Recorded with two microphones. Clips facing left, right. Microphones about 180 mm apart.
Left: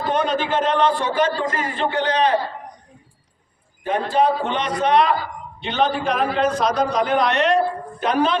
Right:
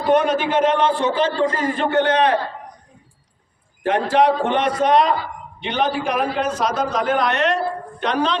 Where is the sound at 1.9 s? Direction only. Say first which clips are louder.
Right 3 dB; 55° right (ahead or behind).